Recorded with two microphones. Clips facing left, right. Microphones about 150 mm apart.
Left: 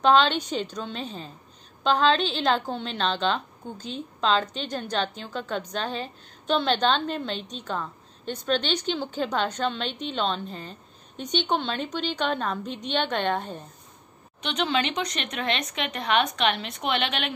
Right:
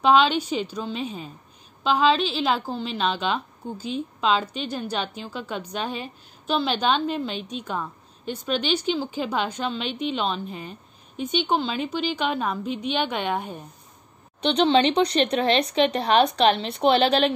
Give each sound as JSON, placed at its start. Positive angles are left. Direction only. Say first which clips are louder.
{"t": 0.0, "sound": "a woman's voice", "louder": "right 1 dB", "side_deg": -10}
{"t": 14.4, "sound": "speech", "louder": "right 7 dB", "side_deg": -30}